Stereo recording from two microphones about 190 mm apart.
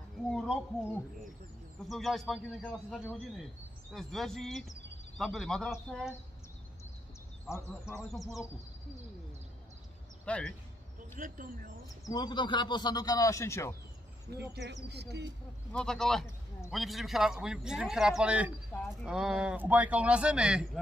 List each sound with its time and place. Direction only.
0.3 s a sound: centre (ahead or behind)
1.9 s speech: centre (ahead or behind)
8.1 s speech: centre (ahead or behind)
10.2 s speech: 5° left (ahead or behind)
11.1 s speech: 45° right (ahead or behind)
12.1 s speech: 20° left (ahead or behind)
14.5 s speech: 65° right (ahead or behind)
15.7 s speech: 5° left (ahead or behind)